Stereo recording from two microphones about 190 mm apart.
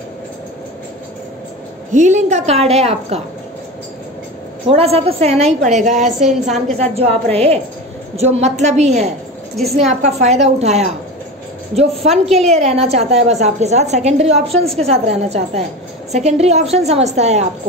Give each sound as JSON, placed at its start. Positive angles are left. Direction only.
{"t": 1.9, "sound": "a woman's voice", "side_deg": -40}
{"t": 4.6, "sound": "a woman's voice", "side_deg": -30}